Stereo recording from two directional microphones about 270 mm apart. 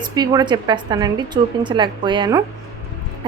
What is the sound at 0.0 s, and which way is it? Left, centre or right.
A woman's voice, centre.